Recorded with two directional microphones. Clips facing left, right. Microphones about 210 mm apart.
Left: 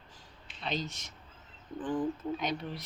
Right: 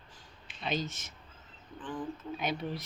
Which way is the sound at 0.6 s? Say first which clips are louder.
Right 1 dB; 5° right (ahead or behind).